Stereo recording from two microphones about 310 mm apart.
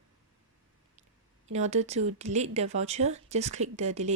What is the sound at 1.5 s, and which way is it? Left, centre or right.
Speech, right.